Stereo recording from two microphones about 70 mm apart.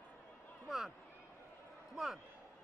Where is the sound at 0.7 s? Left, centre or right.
Centre.